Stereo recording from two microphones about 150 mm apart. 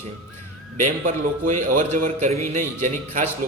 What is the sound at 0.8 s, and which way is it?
A man's voice, 55° right (ahead or behind).